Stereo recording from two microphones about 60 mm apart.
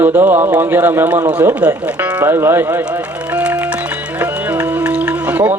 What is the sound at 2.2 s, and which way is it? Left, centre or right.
Speech, right.